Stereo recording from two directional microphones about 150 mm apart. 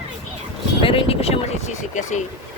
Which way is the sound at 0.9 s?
40° left (ahead or behind).